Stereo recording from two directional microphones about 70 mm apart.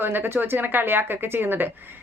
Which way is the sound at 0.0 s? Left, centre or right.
Right.